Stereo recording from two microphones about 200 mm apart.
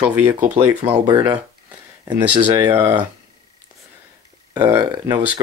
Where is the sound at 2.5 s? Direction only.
10° right (ahead or behind).